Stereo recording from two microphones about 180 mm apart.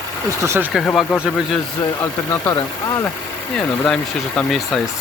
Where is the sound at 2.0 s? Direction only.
15° left (ahead or behind).